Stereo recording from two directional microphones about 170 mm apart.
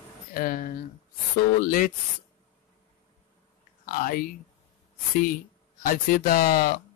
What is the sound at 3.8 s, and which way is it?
Speech, 55° left (ahead or behind).